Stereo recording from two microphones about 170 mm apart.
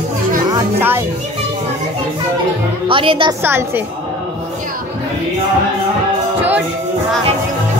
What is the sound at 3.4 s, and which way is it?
Speech, 10° right (ahead or behind).